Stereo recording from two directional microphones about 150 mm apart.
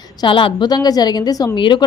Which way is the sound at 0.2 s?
35° left (ahead or behind).